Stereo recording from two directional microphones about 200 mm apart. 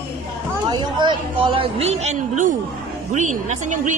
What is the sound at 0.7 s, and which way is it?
Speech, 20° right (ahead or behind).